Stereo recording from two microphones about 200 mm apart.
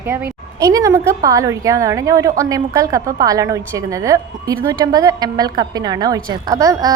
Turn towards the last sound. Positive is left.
turn(degrees=-15)  # may be behind; listen again after turning